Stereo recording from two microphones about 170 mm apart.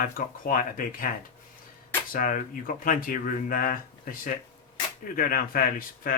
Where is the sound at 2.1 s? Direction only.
55° left (ahead or behind).